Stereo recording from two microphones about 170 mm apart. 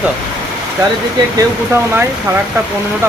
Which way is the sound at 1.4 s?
15° right (ahead or behind).